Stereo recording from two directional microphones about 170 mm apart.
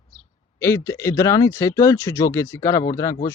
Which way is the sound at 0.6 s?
15° left (ahead or behind).